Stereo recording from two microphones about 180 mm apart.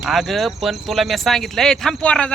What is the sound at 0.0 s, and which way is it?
Speech, centre (ahead or behind).